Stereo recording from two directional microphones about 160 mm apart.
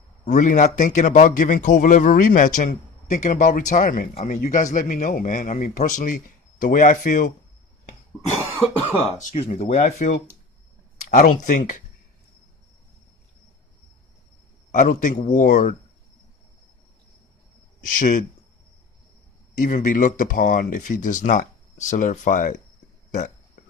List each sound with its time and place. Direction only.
0.3 s a man's voice: 50° left (ahead or behind)
4.1 s a man's voice: 45° left (ahead or behind)
8.4 s cough: 15° right (ahead or behind)
9.1 s a man's voice: 45° left (ahead or behind)
14.7 s a man's voice: 55° left (ahead or behind)
17.8 s speech: 60° left (ahead or behind)
19.5 s speech: 55° left (ahead or behind)